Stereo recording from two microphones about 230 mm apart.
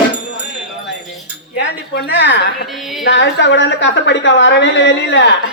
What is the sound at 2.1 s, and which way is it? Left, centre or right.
A man's voice, left.